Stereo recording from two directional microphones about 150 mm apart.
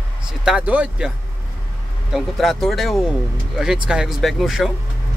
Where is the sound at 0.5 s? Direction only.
10° right (ahead or behind).